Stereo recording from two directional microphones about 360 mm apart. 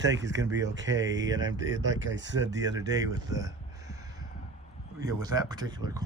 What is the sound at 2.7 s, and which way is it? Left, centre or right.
Speech, centre.